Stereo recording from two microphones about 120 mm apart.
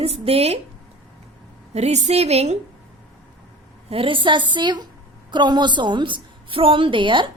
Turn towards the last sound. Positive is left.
turn(degrees=-45)  # may be behind; listen again after turning